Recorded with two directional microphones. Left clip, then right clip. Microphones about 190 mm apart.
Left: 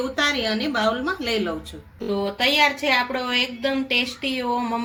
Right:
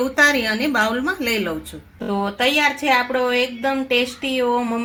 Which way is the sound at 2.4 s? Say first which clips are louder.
Right 1 dB; 25° right (ahead or behind).